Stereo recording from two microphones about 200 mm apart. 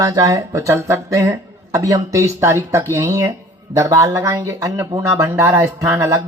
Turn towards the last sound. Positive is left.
turn(degrees=-15)  # may be behind; listen again after turning